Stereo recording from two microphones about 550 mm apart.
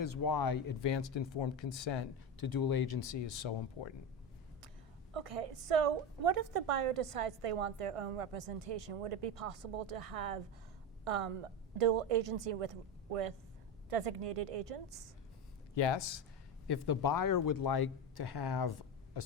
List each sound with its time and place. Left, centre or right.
0.0 s speech: left
2.4 s speech: left
5.1 s a woman's voice: right
15.7 s speech: left